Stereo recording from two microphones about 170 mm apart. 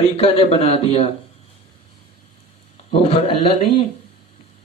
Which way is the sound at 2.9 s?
35° left (ahead or behind).